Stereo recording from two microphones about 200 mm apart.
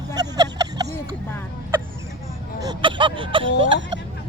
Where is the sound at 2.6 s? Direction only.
20° right (ahead or behind).